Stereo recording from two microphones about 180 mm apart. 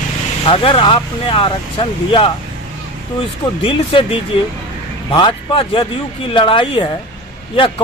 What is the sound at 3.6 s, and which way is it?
Speech, 30° left (ahead or behind).